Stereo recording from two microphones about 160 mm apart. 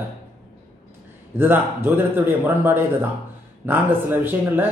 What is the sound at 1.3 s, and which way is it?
Speech, 15° right (ahead or behind).